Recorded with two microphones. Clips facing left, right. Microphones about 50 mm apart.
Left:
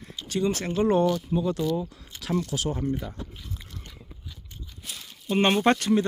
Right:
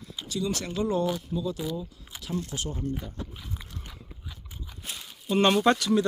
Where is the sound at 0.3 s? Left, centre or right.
Left.